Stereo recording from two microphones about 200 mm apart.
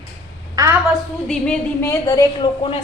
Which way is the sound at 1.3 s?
10° left (ahead or behind).